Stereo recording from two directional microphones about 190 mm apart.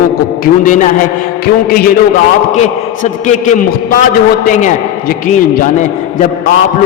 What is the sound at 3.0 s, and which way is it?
A man's voice, 40° left (ahead or behind).